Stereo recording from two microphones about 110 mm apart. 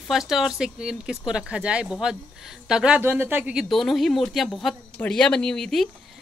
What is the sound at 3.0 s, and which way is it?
Speech, 20° right (ahead or behind).